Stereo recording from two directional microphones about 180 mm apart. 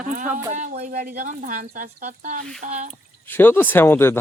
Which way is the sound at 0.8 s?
45° right (ahead or behind).